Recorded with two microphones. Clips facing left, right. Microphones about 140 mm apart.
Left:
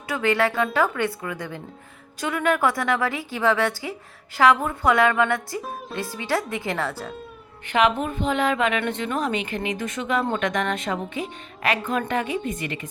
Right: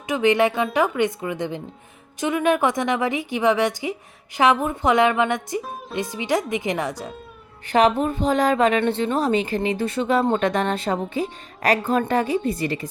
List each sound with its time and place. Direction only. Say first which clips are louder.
0.1 s a woman's voice: right 4 dB; 20° right (ahead or behind)
7.7 s a woman's voice: right 3 dB; 35° right (ahead or behind)